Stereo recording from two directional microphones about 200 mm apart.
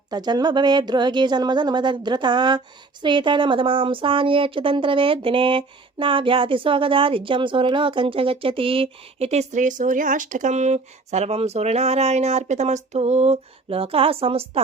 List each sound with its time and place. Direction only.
0.1 s speech: 20° right (ahead or behind)